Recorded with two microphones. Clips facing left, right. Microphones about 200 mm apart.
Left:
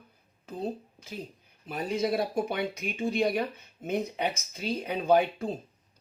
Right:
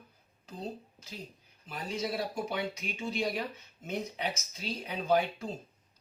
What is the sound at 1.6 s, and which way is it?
Speech, 55° left (ahead or behind).